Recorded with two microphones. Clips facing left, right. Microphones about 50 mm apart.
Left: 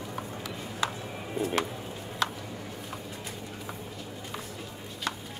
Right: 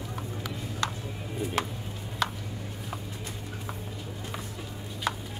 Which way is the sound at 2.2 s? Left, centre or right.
Centre.